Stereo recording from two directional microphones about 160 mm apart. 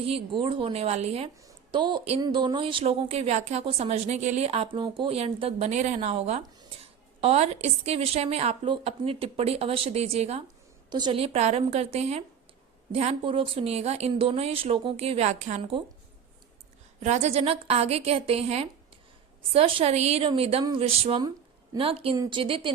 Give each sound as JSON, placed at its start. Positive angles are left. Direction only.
{"t": 0.1, "sound": "a woman's voice", "side_deg": -30}
{"t": 1.5, "sound": "a sound", "side_deg": -30}
{"t": 2.2, "sound": "a woman's voice", "side_deg": -25}
{"t": 10.8, "sound": "a woman's voice", "side_deg": -25}
{"t": 17.0, "sound": "a woman's voice", "side_deg": -45}